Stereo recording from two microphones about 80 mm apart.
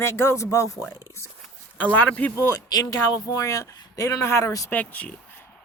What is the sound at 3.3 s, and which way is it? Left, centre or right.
Speech, left.